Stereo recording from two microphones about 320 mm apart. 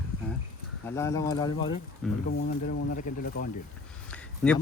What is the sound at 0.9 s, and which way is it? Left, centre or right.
Speech, centre.